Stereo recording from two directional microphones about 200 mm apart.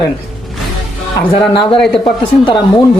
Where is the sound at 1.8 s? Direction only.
Centre (ahead or behind).